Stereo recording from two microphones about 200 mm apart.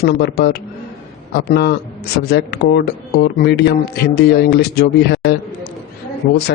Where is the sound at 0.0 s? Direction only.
55° left (ahead or behind).